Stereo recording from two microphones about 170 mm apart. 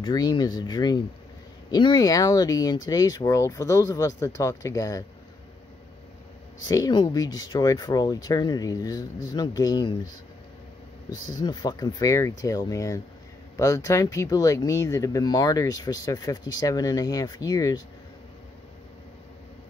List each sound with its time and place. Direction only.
0.0 s speech: 25° left (ahead or behind)
6.7 s speech: 25° left (ahead or behind)
11.4 s speech: 25° left (ahead or behind)